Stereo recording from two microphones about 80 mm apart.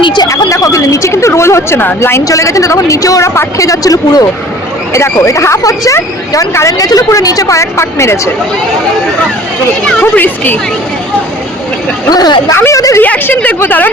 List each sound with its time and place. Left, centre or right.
0.0 s a sound: left
0.3 s speech: left
2.2 s a woman's voice: left
4.9 s speech: left
6.7 s a woman's voice: left
10.0 s speech: left
12.1 s speech: left
12.5 s speech: left
13.0 s speech: left